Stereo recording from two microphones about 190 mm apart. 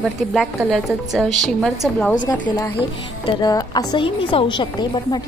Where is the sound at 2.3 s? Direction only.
10° left (ahead or behind).